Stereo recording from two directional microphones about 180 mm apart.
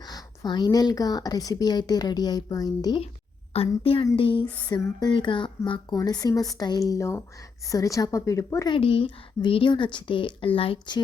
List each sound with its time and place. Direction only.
0.0 s a woman's voice: 20° left (ahead or behind)
3.5 s a woman's voice: 35° left (ahead or behind)